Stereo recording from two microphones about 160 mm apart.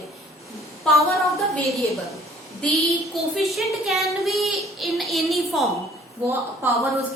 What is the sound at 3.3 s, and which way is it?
A woman's voice, centre (ahead or behind).